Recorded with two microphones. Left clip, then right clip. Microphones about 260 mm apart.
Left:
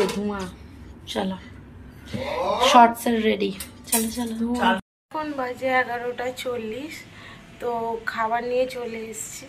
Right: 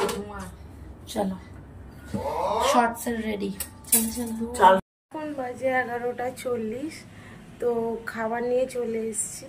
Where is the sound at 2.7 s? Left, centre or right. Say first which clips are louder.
Left 11 dB; centre.